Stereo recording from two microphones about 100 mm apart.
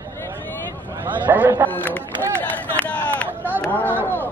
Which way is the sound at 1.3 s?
20° right (ahead or behind).